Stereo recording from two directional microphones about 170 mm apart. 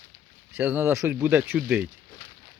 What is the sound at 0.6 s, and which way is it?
Speech, 10° right (ahead or behind).